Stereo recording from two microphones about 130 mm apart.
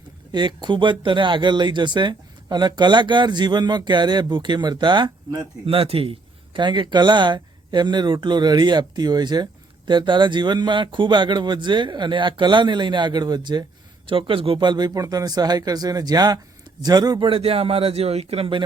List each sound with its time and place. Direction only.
0.3 s a man's voice: 35° right (ahead or behind)